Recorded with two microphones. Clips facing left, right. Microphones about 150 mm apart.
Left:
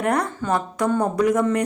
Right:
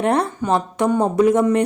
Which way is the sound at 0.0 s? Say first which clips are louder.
Right 3 dB; 25° right (ahead or behind).